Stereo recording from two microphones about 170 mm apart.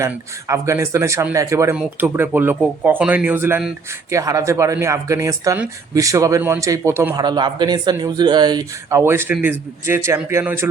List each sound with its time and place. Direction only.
0.0 s speech: 15° right (ahead or behind)
7.1 s speech: 25° right (ahead or behind)